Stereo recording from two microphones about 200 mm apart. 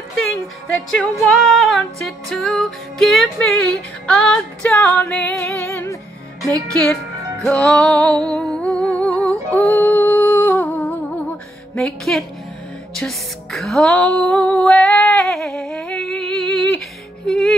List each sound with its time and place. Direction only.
0.7 s music: centre (ahead or behind)